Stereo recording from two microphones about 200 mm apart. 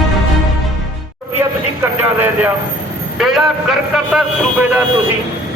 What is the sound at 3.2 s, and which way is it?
A man's voice, centre (ahead or behind).